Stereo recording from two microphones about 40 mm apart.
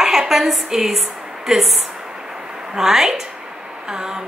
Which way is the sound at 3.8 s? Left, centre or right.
Centre.